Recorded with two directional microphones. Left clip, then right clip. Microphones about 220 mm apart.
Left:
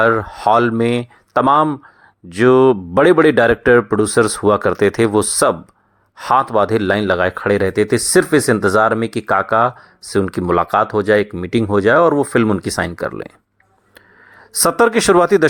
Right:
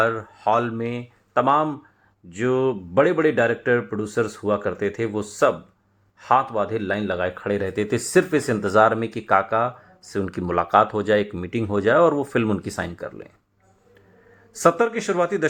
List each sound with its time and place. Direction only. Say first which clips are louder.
0.0 s speech: left 8 dB; 25° left (ahead or behind)
14.6 s speech: left 6 dB; 35° left (ahead or behind)